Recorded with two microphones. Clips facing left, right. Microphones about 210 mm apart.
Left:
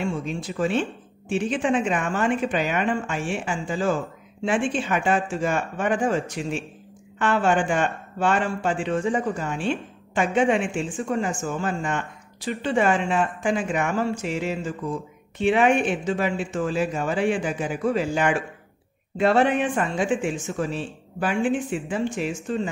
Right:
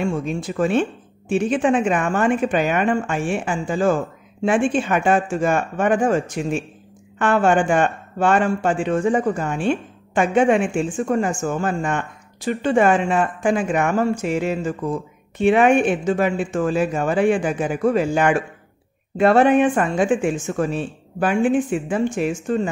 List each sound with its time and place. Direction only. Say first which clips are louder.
0.0 s speech: right 4 dB; 50° right (ahead or behind)